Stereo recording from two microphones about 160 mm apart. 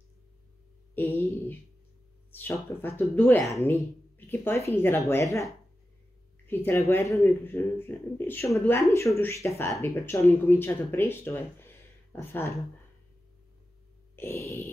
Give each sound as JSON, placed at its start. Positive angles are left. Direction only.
{"t": 0.9, "sound": "a sound", "side_deg": 15}
{"t": 2.3, "sound": "speech", "side_deg": 15}
{"t": 14.1, "sound": "speech", "side_deg": 15}